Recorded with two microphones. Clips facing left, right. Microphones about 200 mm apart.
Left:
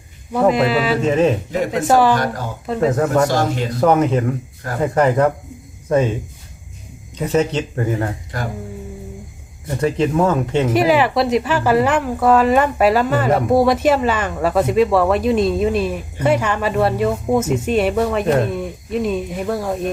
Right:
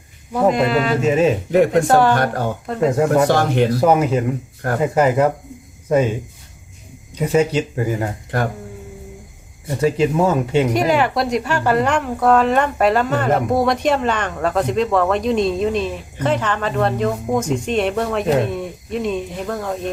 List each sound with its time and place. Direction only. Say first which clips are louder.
0.3 s speech: left 1 dB; centre (ahead or behind)
1.0 s speech: even; 10° right (ahead or behind)
1.5 s a man's voice: right 7 dB; 60° right (ahead or behind)
1.9 s speech: even; 5° left (ahead or behind)
2.1 s a man's voice: right 2 dB; 60° right (ahead or behind)
2.9 s speech: right 2 dB; 10° right (ahead or behind)
3.2 s a man's voice: right 3 dB; 60° right (ahead or behind)
3.8 s speech: even; 10° right (ahead or behind)
7.2 s speech: right 1 dB; 10° right (ahead or behind)
9.8 s speech: even; 10° right (ahead or behind)
10.7 s speech: left 2 dB; 5° left (ahead or behind)